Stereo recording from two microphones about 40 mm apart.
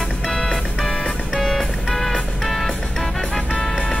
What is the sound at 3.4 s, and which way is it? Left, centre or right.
Music, left.